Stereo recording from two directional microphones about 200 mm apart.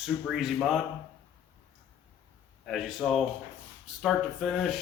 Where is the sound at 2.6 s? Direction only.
Centre (ahead or behind).